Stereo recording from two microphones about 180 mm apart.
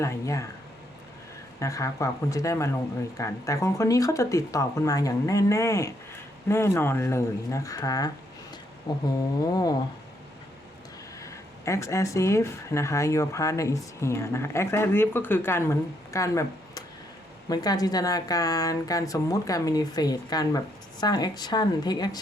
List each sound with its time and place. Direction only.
0.0 s speech: 15° left (ahead or behind)
1.5 s a woman's voice: 15° left (ahead or behind)
11.2 s a woman's voice: 15° left (ahead or behind)